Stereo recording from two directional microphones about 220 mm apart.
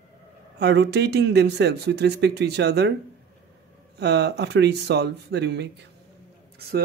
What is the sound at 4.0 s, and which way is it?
Speech, 50° right (ahead or behind).